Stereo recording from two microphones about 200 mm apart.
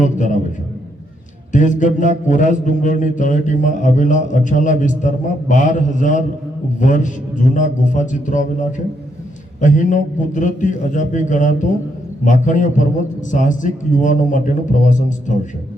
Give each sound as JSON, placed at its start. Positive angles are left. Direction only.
{"t": 1.5, "sound": "a man's voice", "side_deg": 40}